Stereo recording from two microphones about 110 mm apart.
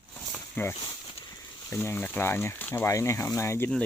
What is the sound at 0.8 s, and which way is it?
Speech, 45° left (ahead or behind).